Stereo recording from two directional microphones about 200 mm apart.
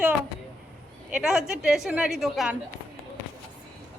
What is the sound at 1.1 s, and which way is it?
A woman's voice, centre (ahead or behind).